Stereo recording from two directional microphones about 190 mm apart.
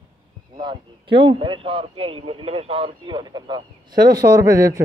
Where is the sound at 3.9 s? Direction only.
55° right (ahead or behind).